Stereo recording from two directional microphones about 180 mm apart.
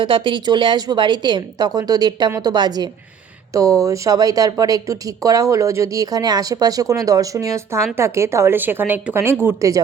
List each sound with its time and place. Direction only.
0.0 s a woman's voice: 25° right (ahead or behind)